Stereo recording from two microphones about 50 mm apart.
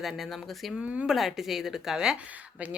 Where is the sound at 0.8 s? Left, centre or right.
Centre.